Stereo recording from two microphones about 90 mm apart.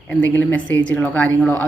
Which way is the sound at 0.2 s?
20° left (ahead or behind).